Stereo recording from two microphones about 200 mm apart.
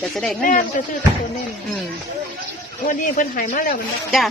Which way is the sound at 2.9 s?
45° left (ahead or behind).